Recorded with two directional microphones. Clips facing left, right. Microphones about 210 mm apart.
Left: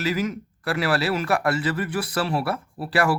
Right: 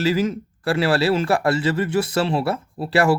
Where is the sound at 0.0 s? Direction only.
30° right (ahead or behind).